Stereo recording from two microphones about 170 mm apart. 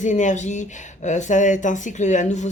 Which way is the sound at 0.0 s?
45° left (ahead or behind).